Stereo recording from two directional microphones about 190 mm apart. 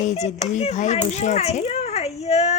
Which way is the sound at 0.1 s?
35° left (ahead or behind).